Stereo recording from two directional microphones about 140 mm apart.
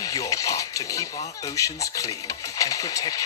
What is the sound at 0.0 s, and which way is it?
Speech, 25° left (ahead or behind).